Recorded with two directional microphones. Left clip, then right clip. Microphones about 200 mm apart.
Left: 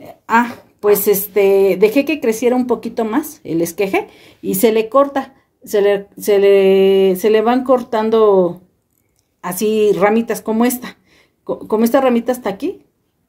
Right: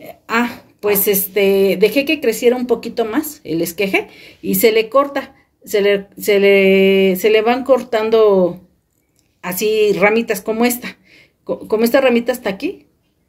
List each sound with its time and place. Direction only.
0.0 s a woman's voice: 45° left (ahead or behind)